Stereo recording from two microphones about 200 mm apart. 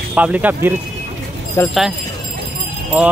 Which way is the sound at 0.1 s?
5° right (ahead or behind).